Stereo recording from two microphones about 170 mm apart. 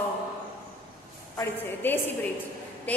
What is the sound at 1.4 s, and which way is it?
Speech, 10° left (ahead or behind).